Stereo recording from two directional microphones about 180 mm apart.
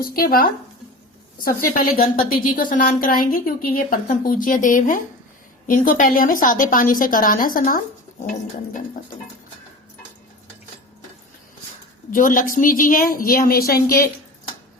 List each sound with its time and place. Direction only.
0.0 s a woman's voice: 55° left (ahead or behind)
12.1 s a woman's voice: 50° left (ahead or behind)